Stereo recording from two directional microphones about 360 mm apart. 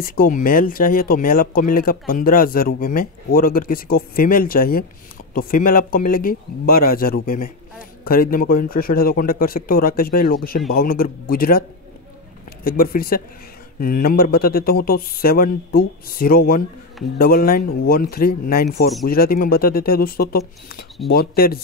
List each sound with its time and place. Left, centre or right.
0.0 s speech: left
12.6 s speech: left